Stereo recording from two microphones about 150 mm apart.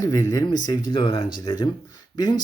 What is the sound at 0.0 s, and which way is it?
Speech, 25° left (ahead or behind).